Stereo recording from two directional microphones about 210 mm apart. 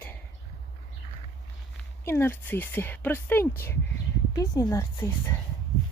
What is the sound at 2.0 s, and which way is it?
Speech, 10° left (ahead or behind).